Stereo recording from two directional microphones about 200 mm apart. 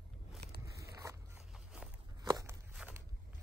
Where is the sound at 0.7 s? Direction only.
15° right (ahead or behind).